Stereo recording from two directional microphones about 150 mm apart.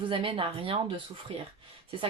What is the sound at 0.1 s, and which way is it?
Speech, 35° right (ahead or behind).